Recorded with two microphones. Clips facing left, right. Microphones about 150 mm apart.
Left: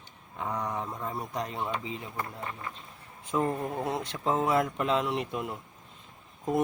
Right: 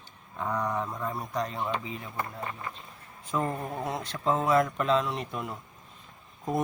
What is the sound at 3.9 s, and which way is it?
Speech, 20° left (ahead or behind).